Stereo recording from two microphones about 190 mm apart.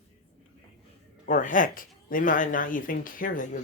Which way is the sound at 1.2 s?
45° left (ahead or behind).